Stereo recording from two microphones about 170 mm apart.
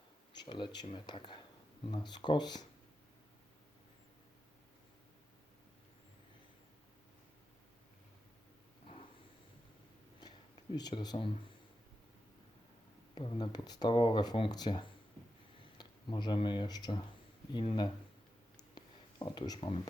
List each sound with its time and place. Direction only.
0.3 s speech: 25° left (ahead or behind)
10.8 s speech: 25° left (ahead or behind)
13.1 s speech: 25° left (ahead or behind)
19.2 s speech: 25° left (ahead or behind)